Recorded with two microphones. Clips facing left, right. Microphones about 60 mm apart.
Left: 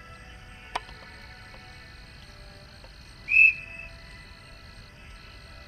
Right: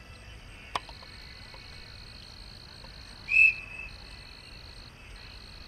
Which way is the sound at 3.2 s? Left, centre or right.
Left.